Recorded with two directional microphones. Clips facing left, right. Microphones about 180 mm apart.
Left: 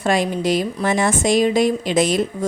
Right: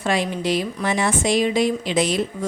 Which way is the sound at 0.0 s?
45° left (ahead or behind).